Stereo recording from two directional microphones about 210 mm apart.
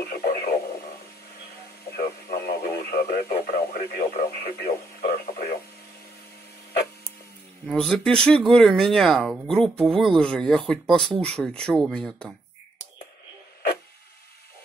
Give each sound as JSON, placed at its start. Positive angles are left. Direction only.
{"t": 0.0, "sound": "radio", "side_deg": 50}
{"t": 1.9, "sound": "radio", "side_deg": 50}
{"t": 5.0, "sound": "a sound", "side_deg": 50}
{"t": 7.6, "sound": "speech", "side_deg": 0}